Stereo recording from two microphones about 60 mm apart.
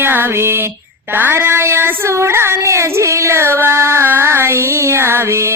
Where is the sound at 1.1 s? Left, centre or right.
Right.